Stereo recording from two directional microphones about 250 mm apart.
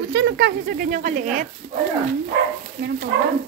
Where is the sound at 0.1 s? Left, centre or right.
Right.